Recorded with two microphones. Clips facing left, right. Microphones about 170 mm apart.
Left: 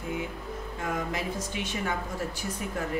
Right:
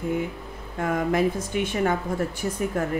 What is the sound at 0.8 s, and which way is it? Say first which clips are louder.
Speech: right 10 dB; 55° right (ahead or behind).